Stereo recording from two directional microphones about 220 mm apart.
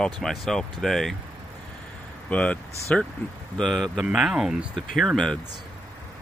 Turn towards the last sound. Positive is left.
turn(degrees=0)  # may be behind; listen again after turning